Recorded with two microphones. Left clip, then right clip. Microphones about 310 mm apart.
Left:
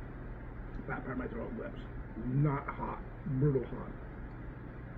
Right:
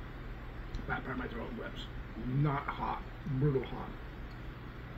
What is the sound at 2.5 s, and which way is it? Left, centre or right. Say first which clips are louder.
Speech: right 4 dB; centre.